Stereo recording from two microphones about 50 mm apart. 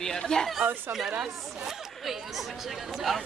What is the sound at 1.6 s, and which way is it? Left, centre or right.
Chatter, centre.